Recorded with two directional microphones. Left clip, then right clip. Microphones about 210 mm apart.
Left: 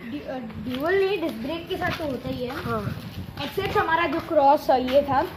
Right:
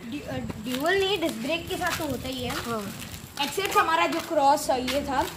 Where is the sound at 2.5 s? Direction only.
Centre (ahead or behind).